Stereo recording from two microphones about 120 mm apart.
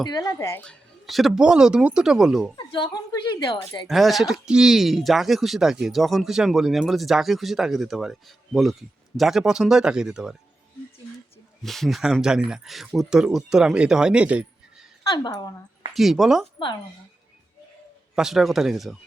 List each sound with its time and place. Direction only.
0.0 s a woman's voice: 30° left (ahead or behind)
0.6 s speech: 5° left (ahead or behind)
2.6 s a woman's voice: 40° left (ahead or behind)
3.3 s speech: 30° left (ahead or behind)
3.8 s speech: centre (ahead or behind)
11.6 s speech: centre (ahead or behind)
15.3 s a woman's voice: 30° left (ahead or behind)
15.9 s speech: centre (ahead or behind)
18.1 s speech: 5° right (ahead or behind)